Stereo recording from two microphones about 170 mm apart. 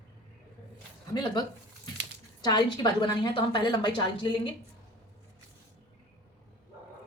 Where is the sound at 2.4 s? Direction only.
25° left (ahead or behind).